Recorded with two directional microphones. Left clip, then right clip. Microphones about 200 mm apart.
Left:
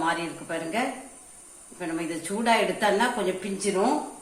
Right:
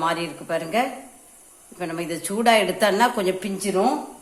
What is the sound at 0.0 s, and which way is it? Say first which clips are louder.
Speech: right 3 dB; 45° right (ahead or behind).